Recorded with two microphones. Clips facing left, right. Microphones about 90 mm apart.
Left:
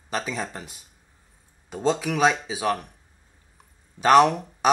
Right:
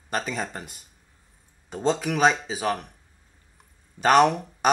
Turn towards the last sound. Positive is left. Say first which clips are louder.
# even
turn(degrees=0)  # may be behind; listen again after turning